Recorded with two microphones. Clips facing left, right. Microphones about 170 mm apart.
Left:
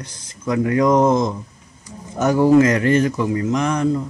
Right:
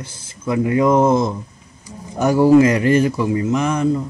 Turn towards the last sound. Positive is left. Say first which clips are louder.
# right 1 dB
turn(degrees=-5)  # may be behind; listen again after turning